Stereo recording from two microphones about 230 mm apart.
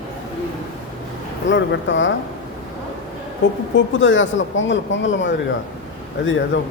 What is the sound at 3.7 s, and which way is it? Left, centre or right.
Speech, left.